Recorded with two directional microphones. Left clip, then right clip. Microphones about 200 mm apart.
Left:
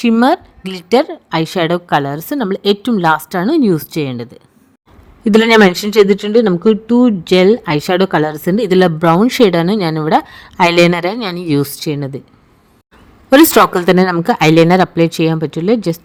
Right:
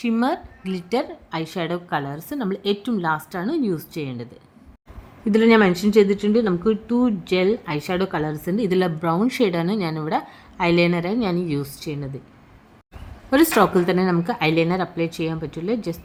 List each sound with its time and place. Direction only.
0.0 s speech: 45° left (ahead or behind)
13.3 s speech: 40° left (ahead or behind)